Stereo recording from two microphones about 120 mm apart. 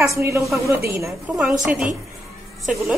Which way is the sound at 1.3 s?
5° right (ahead or behind).